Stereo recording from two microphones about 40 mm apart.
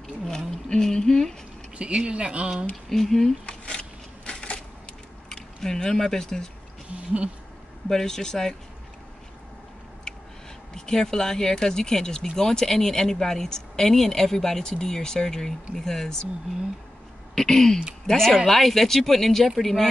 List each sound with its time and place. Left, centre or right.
0.2 s a sound: centre
1.8 s speech: right
2.9 s speech: centre
3.4 s a sound: left
5.3 s speech: centre
7.9 s speech: centre
10.7 s speech: centre
17.4 s speech: centre